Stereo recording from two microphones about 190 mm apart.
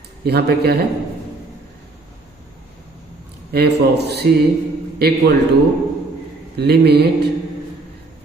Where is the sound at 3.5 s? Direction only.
60° right (ahead or behind).